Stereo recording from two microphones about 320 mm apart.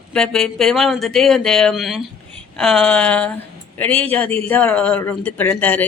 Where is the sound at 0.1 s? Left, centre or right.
Centre.